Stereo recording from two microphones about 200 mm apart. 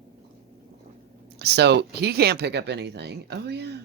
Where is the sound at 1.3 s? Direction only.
55° right (ahead or behind).